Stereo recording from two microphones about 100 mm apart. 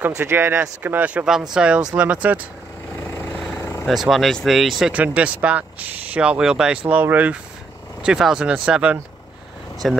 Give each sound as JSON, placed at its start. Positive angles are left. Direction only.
{"t": 0.1, "sound": "speech", "side_deg": -25}
{"t": 3.0, "sound": "vehicle", "side_deg": 25}
{"t": 3.8, "sound": "speech", "side_deg": 0}
{"t": 4.9, "sound": "speech", "side_deg": -15}
{"t": 9.8, "sound": "speech", "side_deg": 5}